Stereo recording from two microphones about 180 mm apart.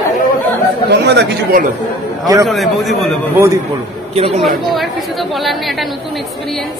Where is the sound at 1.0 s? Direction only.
70° right (ahead or behind).